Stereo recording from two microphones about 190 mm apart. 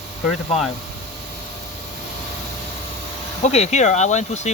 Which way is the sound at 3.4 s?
35° left (ahead or behind).